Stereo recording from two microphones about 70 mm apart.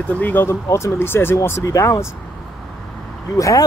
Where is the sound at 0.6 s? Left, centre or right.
Left.